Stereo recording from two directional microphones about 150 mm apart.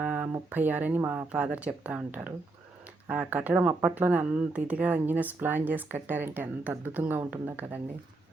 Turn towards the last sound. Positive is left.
turn(degrees=-10)  # may be behind; listen again after turning